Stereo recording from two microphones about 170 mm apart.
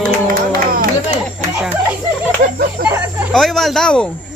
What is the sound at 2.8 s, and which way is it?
Speech, 60° right (ahead or behind).